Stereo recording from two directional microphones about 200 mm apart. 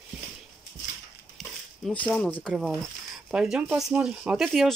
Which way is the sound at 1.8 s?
5° left (ahead or behind).